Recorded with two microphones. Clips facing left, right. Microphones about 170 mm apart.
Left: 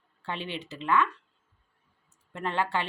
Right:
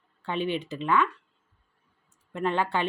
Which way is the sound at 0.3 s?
15° right (ahead or behind).